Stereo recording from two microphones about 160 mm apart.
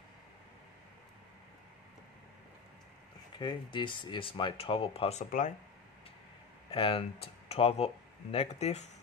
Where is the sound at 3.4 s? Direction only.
30° left (ahead or behind).